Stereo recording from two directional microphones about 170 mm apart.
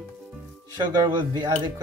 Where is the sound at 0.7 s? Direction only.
25° right (ahead or behind).